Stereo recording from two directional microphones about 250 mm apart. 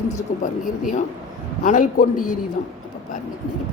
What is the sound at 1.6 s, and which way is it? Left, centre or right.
Speech, left.